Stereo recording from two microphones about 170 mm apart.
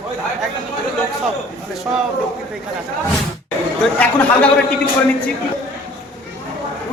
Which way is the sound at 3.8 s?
10° left (ahead or behind).